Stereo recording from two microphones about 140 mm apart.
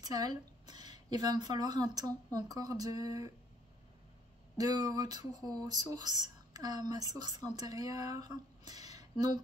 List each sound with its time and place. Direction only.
0.0 s a woman's voice: 25° right (ahead or behind)
4.6 s speech: 30° right (ahead or behind)